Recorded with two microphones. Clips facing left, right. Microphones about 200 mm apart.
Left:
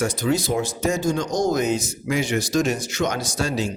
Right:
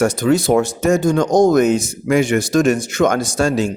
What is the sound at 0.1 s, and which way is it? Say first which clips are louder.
A man's voice: right 8 dB; 55° right (ahead or behind).